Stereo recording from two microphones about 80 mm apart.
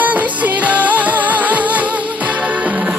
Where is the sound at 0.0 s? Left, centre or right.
Right.